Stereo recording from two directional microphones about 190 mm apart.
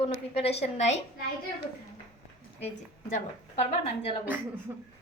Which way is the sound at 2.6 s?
40° left (ahead or behind).